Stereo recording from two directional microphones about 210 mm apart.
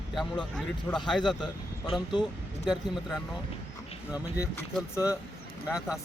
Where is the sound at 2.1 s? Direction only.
20° left (ahead or behind).